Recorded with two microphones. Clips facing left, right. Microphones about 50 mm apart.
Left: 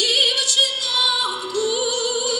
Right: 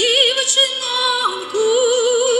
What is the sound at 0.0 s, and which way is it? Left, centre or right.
Music, right.